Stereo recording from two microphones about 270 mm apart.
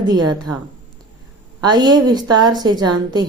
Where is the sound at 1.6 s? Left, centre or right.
Centre.